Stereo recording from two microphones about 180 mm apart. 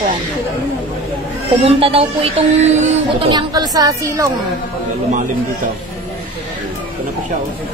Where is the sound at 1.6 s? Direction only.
35° right (ahead or behind).